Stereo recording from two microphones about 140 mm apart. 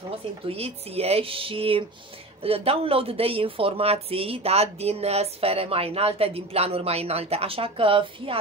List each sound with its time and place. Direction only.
0.5 s speech: 45° right (ahead or behind)